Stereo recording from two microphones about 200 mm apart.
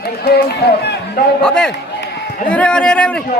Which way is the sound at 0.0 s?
55° left (ahead or behind).